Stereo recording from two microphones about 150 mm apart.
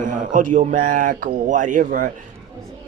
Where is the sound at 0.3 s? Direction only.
60° right (ahead or behind).